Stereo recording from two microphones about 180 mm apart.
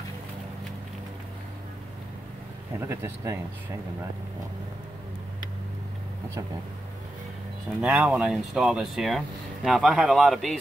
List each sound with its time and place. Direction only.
2.8 s speech: 15° right (ahead or behind)
7.8 s speech: 10° right (ahead or behind)